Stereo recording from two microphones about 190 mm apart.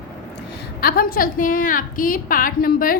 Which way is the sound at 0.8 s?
50° left (ahead or behind).